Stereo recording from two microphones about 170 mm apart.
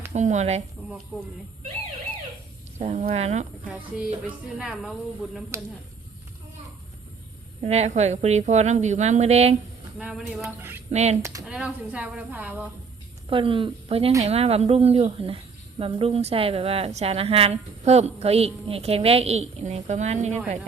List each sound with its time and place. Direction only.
0.1 s speech: 45° right (ahead or behind)
1.1 s a woman's voice: 5° right (ahead or behind)
2.7 s speech: 45° right (ahead or behind)
3.9 s a woman's voice: 5° right (ahead or behind)
7.6 s a woman's voice: 40° right (ahead or behind)
10.0 s a woman's voice: 5° right (ahead or behind)
10.9 s a woman's voice: 40° right (ahead or behind)
11.2 s speech: 20° right (ahead or behind)
11.4 s speech: 5° right (ahead or behind)
13.2 s a woman's voice: 30° right (ahead or behind)